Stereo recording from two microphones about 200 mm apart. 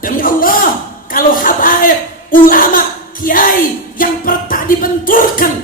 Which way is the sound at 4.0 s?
45° left (ahead or behind).